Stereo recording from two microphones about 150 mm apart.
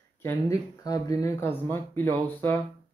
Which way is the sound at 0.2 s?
20° left (ahead or behind).